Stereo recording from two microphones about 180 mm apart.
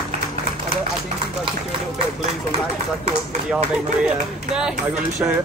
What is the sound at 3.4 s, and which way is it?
Speech, 5° right (ahead or behind).